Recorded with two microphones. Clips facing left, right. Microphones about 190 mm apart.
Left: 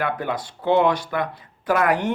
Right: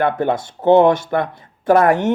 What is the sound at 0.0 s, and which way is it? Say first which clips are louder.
Speech: right 7 dB; 25° right (ahead or behind).